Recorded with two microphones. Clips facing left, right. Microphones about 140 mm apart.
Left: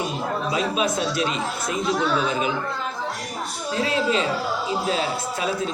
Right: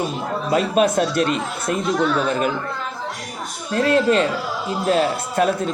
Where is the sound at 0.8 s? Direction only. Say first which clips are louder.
Right 6 dB; 55° right (ahead or behind).